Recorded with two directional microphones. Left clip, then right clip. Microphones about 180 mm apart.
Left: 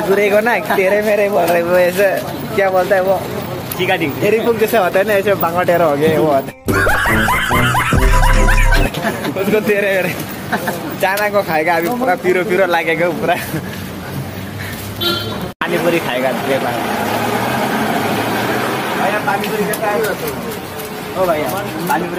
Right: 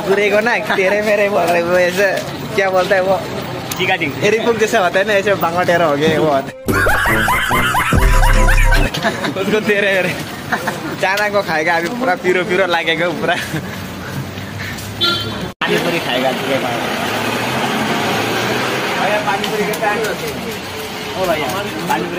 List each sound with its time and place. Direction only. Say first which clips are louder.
0.1 s speech: even; 5° left (ahead or behind)
3.8 s speech: even; 25° left (ahead or behind)
4.2 s speech: even; centre (ahead or behind)